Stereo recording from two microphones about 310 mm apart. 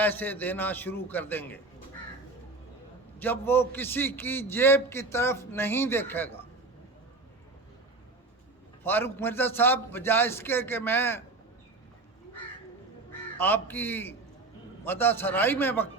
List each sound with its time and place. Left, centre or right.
0.0 s a man's voice: centre
3.2 s a man's voice: centre
8.8 s a man's voice: centre
13.4 s a man's voice: centre